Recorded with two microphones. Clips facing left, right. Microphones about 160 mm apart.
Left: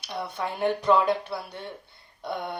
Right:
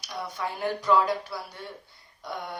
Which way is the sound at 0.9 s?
25° left (ahead or behind).